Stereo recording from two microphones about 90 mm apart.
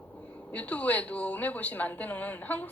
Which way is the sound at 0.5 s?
15° left (ahead or behind).